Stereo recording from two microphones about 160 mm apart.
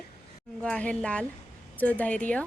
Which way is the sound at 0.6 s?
10° left (ahead or behind).